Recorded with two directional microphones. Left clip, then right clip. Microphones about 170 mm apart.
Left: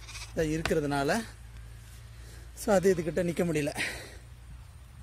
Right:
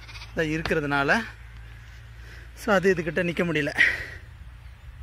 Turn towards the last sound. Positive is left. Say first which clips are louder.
# right 12 dB
turn(degrees=0)  # may be behind; listen again after turning